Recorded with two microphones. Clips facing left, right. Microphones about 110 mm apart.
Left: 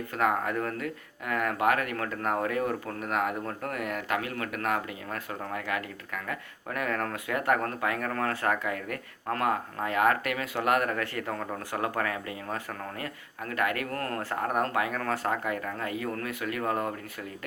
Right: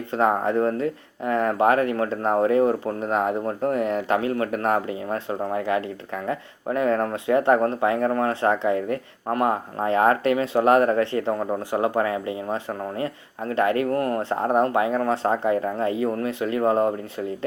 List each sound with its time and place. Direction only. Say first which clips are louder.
0.1 s speech: right 7 dB; 30° right (ahead or behind)